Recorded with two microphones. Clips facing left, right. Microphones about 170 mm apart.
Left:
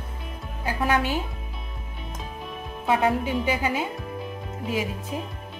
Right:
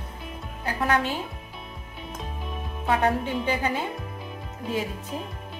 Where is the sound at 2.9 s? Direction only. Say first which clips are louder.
Left 1 dB; 10° left (ahead or behind).